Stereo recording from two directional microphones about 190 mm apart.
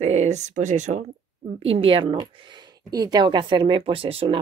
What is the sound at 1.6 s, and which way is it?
Speech, 30° right (ahead or behind).